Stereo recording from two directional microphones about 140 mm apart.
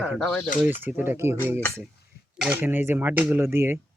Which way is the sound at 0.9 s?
15° right (ahead or behind).